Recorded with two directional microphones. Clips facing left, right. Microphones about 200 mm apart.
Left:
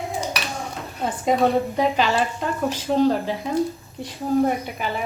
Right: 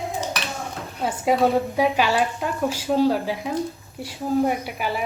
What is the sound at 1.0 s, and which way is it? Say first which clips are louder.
A woman's voice: even; 10° right (ahead or behind).